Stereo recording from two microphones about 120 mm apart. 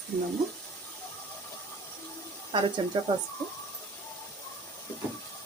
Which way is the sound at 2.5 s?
40° right (ahead or behind).